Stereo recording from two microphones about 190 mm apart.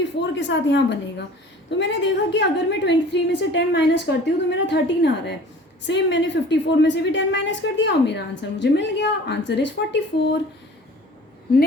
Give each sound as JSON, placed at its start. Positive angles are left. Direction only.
{"t": 0.2, "sound": "a woman's voice", "side_deg": 70}